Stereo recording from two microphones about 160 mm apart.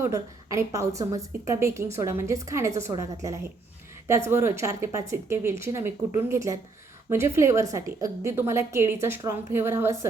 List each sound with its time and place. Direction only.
0.0 s a woman's voice: 20° right (ahead or behind)